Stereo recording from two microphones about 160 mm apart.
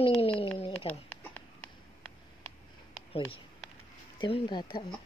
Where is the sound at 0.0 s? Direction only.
40° left (ahead or behind).